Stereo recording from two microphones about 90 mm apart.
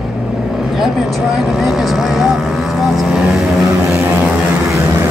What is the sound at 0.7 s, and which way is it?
Speech, centre (ahead or behind).